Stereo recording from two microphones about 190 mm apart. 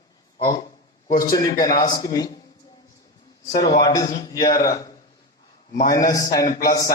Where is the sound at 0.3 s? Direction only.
20° left (ahead or behind).